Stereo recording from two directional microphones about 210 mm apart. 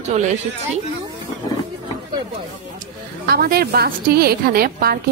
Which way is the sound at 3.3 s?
45° right (ahead or behind).